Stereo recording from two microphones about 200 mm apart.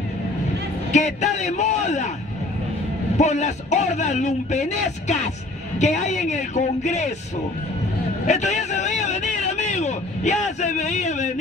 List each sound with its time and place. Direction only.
0.9 s a man's voice: 35° left (ahead or behind)
3.2 s a man's voice: 35° left (ahead or behind)
8.3 s speech: 35° left (ahead or behind)